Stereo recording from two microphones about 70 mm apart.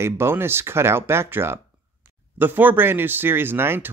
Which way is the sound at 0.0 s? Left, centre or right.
Right.